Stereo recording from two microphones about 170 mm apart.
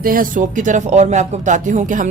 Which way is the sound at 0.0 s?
55° right (ahead or behind).